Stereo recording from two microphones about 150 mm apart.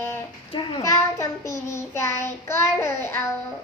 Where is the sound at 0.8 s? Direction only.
20° left (ahead or behind).